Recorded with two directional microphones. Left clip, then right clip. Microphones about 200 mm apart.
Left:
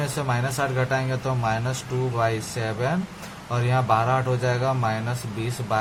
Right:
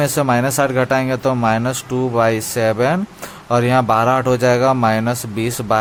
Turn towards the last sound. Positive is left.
turn(degrees=-45)  # may be behind; listen again after turning